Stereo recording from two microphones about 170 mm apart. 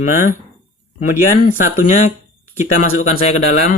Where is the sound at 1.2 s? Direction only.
50° left (ahead or behind).